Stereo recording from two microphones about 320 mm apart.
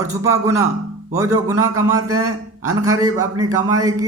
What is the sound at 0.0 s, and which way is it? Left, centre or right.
A man's voice, centre.